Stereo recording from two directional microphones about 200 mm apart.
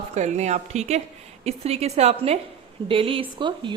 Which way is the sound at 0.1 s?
35° right (ahead or behind).